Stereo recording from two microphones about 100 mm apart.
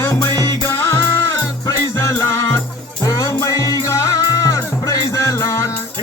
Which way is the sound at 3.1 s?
35° left (ahead or behind).